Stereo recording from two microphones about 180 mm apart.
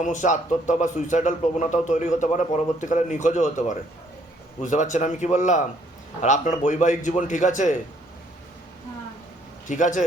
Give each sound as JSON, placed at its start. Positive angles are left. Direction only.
{"t": 0.0, "sound": "a man's voice", "side_deg": 45}
{"t": 4.6, "sound": "a man's voice", "side_deg": 40}
{"t": 9.6, "sound": "a man's voice", "side_deg": 45}